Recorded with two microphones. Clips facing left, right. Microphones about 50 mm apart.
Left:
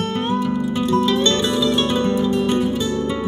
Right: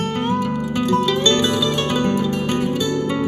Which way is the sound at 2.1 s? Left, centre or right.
Right.